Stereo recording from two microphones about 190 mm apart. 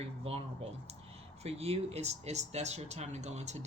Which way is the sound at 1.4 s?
30° right (ahead or behind).